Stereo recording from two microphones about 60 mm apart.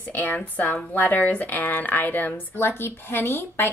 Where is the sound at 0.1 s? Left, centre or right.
Left.